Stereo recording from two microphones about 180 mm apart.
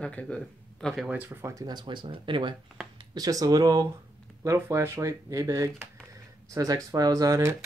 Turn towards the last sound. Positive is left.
turn(degrees=-20)  # may be behind; listen again after turning